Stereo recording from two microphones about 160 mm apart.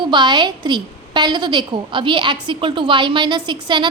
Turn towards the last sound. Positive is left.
turn(degrees=-30)  # may be behind; listen again after turning